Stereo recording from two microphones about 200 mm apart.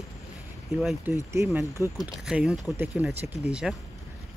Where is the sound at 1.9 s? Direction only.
5° right (ahead or behind).